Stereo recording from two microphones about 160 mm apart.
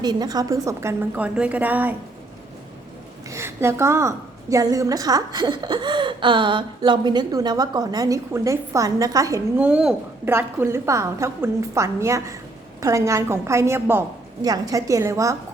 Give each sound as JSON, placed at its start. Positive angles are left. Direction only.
{"t": 0.0, "sound": "a woman's voice", "side_deg": -25}
{"t": 3.2, "sound": "a woman's voice", "side_deg": -15}
{"t": 9.6, "sound": "a woman's voice", "side_deg": -10}